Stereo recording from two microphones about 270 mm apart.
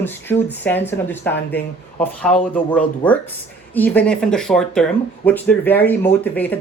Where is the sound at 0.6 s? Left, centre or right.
Centre.